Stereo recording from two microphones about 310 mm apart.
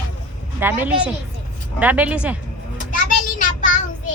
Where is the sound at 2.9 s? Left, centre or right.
Left.